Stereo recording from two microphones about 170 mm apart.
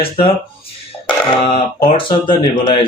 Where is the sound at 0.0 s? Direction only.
30° left (ahead or behind).